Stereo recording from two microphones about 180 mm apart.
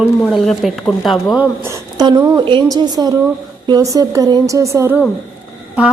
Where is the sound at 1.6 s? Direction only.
15° right (ahead or behind).